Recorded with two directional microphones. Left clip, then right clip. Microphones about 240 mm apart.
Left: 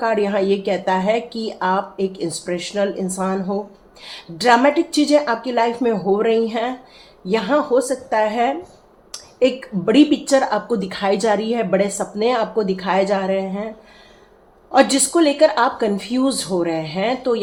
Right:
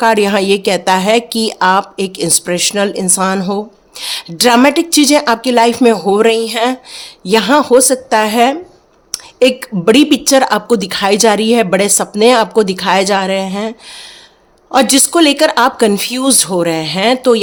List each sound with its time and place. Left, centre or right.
0.0 s a woman's voice: right